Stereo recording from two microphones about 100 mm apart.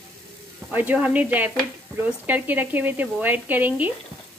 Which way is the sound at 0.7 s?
15° right (ahead or behind).